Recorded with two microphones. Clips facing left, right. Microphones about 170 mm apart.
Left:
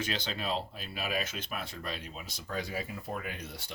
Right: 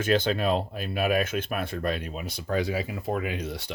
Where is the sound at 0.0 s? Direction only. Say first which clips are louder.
Right 12 dB; 55° right (ahead or behind).